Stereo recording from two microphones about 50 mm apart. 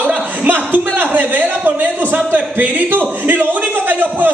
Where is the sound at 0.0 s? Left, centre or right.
Right.